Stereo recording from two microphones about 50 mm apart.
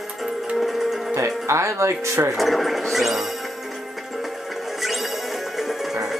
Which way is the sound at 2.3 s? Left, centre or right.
Centre.